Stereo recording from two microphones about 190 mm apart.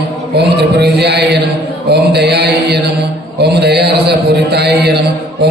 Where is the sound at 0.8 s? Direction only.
60° right (ahead or behind).